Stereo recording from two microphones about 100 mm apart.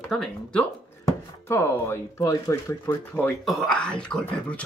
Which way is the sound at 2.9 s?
20° left (ahead or behind).